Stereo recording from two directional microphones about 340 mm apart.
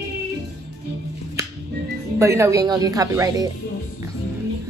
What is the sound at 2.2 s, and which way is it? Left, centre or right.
A woman's voice, centre.